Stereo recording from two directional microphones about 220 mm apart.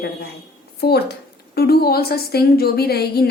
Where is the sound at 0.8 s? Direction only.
45° left (ahead or behind).